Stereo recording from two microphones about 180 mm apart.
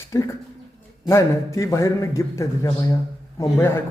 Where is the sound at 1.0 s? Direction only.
15° left (ahead or behind).